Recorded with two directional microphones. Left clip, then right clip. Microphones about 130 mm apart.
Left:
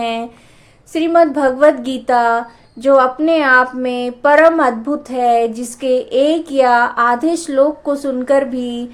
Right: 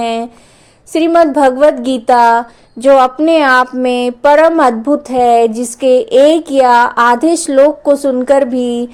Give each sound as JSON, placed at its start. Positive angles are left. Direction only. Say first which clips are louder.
{"t": 0.0, "sound": "a woman's voice", "louder": "right 4 dB", "side_deg": -50}